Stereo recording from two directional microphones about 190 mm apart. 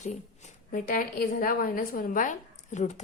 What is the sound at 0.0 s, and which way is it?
A woman's voice, 40° left (ahead or behind).